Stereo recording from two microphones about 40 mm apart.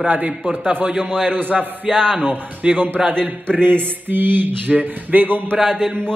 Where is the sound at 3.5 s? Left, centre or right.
Right.